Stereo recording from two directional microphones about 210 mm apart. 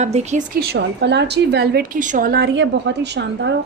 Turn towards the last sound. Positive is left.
turn(degrees=-55)  # may be behind; listen again after turning